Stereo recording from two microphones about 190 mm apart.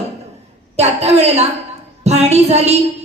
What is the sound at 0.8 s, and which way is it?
A woman's voice, 35° right (ahead or behind).